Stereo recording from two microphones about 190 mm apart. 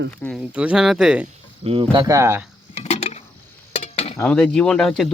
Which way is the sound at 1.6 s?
30° right (ahead or behind).